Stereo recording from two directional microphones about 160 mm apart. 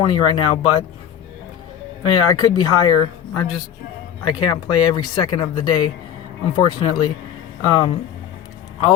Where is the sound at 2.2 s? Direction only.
25° left (ahead or behind).